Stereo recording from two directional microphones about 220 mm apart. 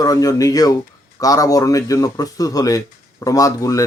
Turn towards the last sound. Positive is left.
turn(degrees=15)  # may be behind; listen again after turning